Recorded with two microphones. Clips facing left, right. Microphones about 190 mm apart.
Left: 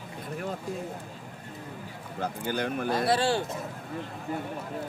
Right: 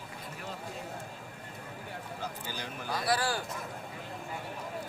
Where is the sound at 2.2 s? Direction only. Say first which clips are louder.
Left 12 dB; 55° left (ahead or behind).